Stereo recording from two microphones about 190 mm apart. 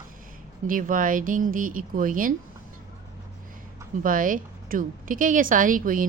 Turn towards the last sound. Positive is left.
turn(degrees=-45)  # may be behind; listen again after turning